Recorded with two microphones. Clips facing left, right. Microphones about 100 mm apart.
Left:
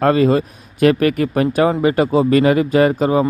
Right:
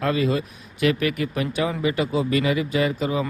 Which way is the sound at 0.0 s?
45° left (ahead or behind).